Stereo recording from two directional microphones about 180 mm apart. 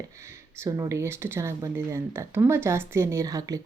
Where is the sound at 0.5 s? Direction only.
15° right (ahead or behind).